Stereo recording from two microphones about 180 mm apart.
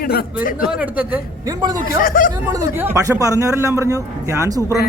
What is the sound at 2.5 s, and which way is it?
A man's voice, 15° right (ahead or behind).